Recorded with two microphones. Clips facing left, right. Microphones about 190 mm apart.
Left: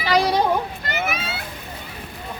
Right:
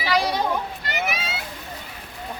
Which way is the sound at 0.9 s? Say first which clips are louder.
Left 2 dB; 50° left (ahead or behind).